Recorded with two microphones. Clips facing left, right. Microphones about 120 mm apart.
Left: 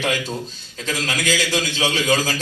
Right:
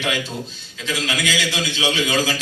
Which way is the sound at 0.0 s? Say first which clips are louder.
Left 1 dB; 40° left (ahead or behind).